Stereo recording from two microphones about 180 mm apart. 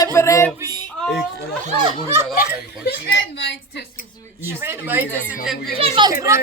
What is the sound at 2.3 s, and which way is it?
Speech, 60° left (ahead or behind).